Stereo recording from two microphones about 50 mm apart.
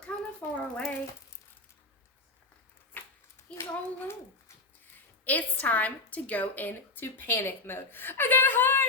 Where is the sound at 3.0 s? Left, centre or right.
Left.